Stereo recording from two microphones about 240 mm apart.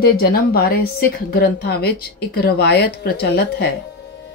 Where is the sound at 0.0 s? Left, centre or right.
Left.